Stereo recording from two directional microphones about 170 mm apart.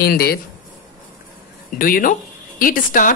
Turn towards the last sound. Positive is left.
turn(degrees=55)  # may be behind; listen again after turning